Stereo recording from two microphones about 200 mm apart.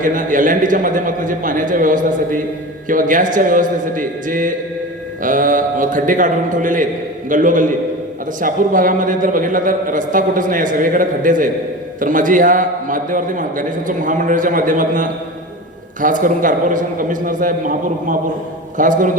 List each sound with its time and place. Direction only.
0.0 s a man's voice: 40° right (ahead or behind)